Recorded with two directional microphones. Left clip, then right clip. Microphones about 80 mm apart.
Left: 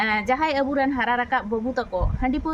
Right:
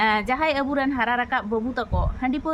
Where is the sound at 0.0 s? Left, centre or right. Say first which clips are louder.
Right 1 dB; right.